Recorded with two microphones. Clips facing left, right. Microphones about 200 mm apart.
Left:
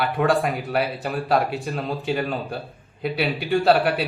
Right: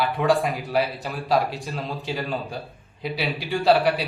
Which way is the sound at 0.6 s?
60° left (ahead or behind).